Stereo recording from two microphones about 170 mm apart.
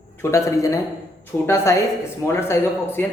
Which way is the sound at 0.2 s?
15° left (ahead or behind).